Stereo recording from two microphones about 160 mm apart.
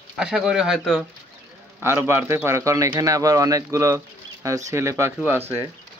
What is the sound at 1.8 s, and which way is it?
A man's voice, 15° right (ahead or behind).